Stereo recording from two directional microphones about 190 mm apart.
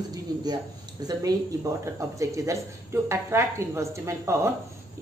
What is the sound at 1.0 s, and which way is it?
Speech, 20° right (ahead or behind).